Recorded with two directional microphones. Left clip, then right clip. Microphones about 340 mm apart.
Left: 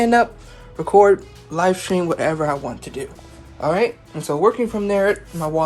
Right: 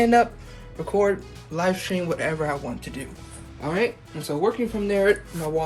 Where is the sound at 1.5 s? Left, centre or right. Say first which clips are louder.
Left 6 dB; centre.